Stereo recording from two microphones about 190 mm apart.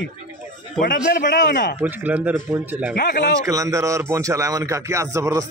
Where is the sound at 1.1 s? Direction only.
45° left (ahead or behind).